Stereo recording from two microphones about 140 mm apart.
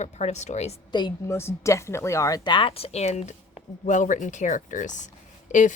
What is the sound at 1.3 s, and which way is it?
Speech, 20° left (ahead or behind).